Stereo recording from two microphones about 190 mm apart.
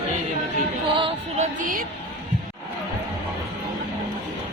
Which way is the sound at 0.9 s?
30° right (ahead or behind).